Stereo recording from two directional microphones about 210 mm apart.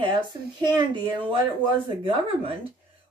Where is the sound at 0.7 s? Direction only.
20° right (ahead or behind).